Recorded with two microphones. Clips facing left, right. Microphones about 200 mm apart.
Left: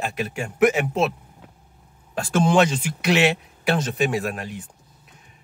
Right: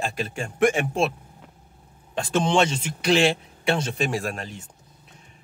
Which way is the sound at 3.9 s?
Centre (ahead or behind).